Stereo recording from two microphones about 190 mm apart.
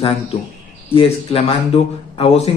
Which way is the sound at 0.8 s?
30° left (ahead or behind).